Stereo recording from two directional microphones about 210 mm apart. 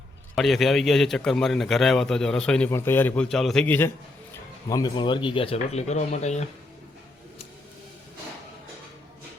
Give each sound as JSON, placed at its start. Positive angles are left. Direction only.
{"t": 0.3, "sound": "a man's voice", "side_deg": 0}